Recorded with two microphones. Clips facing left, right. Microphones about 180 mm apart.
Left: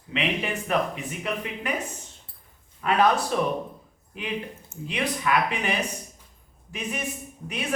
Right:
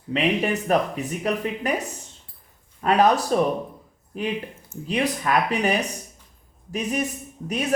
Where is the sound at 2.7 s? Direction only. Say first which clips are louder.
Right 3 dB; 40° right (ahead or behind).